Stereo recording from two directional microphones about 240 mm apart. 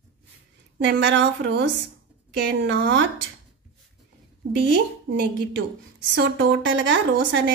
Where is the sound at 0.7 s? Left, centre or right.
Right.